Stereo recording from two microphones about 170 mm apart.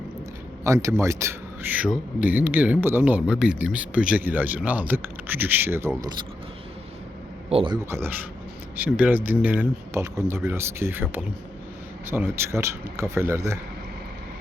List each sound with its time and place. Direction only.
0.6 s speech: 20° right (ahead or behind)
6.0 s speech: 25° right (ahead or behind)
7.5 s speech: 30° right (ahead or behind)
7.9 s speech: 15° right (ahead or behind)